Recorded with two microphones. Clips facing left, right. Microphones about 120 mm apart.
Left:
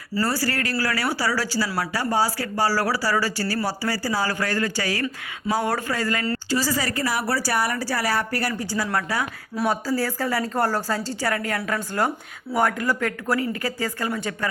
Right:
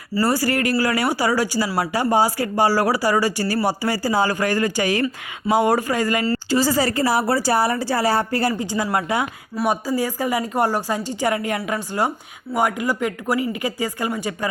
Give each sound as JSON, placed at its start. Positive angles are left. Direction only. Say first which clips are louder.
{"t": 0.1, "sound": "a woman's voice", "louder": "right 5 dB", "side_deg": -15}
{"t": 6.5, "sound": "a woman's voice", "louder": "right 6 dB", "side_deg": -25}